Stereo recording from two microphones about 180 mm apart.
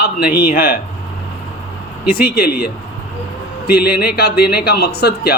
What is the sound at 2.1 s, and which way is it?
Speech, 55° left (ahead or behind).